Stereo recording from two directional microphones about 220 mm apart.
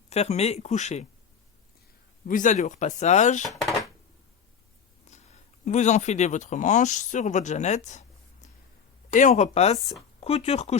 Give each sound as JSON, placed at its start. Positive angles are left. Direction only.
{"t": 0.1, "sound": "speech", "side_deg": 30}
{"t": 2.2, "sound": "speech", "side_deg": 35}
{"t": 5.1, "sound": "speech", "side_deg": 30}